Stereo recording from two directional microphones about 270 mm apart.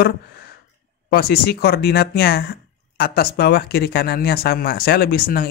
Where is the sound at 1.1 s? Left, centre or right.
Left.